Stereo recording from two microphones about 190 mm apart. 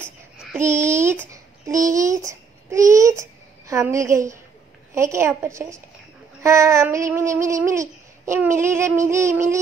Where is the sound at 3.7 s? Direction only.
15° right (ahead or behind).